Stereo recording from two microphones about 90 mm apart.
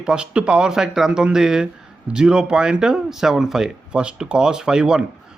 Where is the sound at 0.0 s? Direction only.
10° right (ahead or behind).